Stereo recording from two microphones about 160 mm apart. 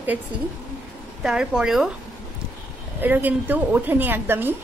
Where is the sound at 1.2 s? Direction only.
5° right (ahead or behind).